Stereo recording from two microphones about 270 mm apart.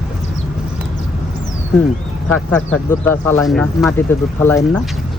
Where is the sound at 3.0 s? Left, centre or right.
Centre.